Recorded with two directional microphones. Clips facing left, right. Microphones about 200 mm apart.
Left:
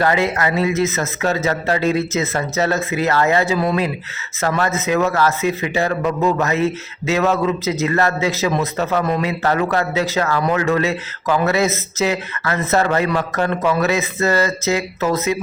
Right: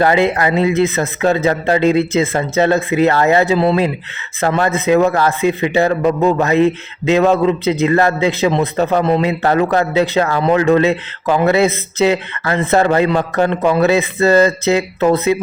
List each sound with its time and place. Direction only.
0.0 s a man's voice: 30° right (ahead or behind)